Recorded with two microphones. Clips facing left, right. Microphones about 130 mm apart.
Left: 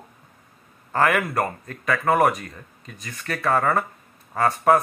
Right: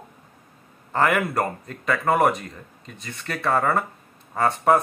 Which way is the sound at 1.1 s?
5° right (ahead or behind).